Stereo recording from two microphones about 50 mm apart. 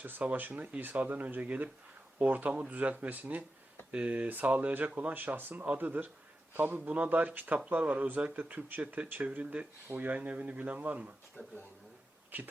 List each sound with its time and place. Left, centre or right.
0.0 s a man's voice: right
11.4 s speech: left
12.3 s speech: right